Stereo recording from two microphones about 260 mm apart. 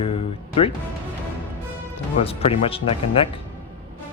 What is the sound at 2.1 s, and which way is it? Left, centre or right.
Speech, left.